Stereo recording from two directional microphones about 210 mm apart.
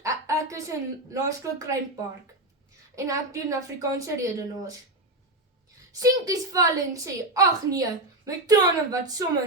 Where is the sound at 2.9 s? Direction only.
15° right (ahead or behind).